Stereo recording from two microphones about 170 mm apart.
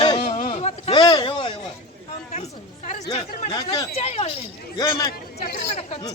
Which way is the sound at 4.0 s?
35° left (ahead or behind).